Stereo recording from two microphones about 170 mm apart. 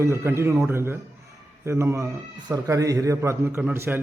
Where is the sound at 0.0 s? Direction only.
15° right (ahead or behind).